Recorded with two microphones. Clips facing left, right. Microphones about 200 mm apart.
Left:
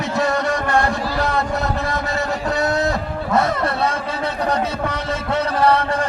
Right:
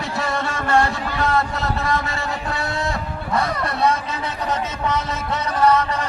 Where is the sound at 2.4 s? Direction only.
40° left (ahead or behind).